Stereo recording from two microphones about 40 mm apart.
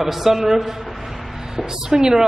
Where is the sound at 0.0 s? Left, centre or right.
Centre.